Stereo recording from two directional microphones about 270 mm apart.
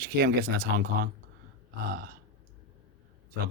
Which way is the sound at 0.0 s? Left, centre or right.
Right.